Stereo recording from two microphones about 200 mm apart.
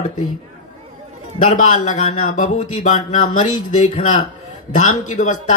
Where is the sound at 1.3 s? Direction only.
40° left (ahead or behind).